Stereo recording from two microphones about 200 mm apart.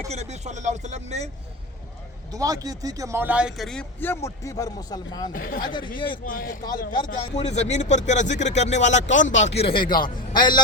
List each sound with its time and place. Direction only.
0.1 s speech: 35° right (ahead or behind)
2.3 s speech: 15° right (ahead or behind); by 5.3 s 20° left (ahead or behind)
5.3 s a man's voice: 45° left (ahead or behind)
5.6 s a man's voice: 25° left (ahead or behind)
6.2 s a man's voice: 40° left (ahead or behind)
6.7 s a man's voice: 20° left (ahead or behind)
7.3 s a man's voice: 35° left (ahead or behind)